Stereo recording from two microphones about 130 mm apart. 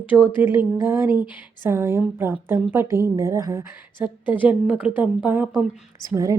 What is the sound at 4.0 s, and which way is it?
Speech, 40° left (ahead or behind).